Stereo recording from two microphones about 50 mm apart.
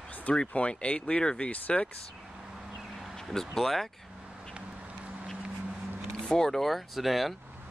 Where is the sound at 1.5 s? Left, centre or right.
Left.